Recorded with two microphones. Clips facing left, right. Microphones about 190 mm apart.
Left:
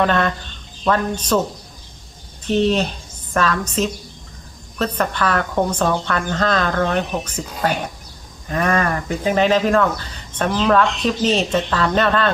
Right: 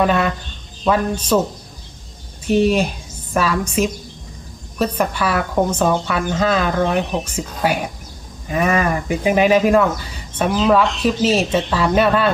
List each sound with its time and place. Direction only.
0.0 s speech: 10° right (ahead or behind)
2.5 s speech: 10° right (ahead or behind)
4.9 s speech: 10° right (ahead or behind)